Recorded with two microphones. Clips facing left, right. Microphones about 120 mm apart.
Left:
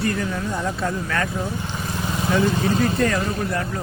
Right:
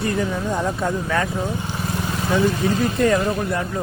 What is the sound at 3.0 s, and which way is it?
Speech, 20° right (ahead or behind).